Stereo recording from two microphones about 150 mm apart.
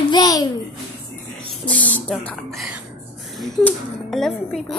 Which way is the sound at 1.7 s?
10° left (ahead or behind).